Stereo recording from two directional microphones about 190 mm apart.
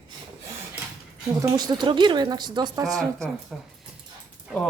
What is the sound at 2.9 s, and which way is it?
Speech, centre (ahead or behind).